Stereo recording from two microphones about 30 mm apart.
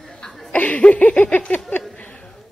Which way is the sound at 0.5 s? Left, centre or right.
Left.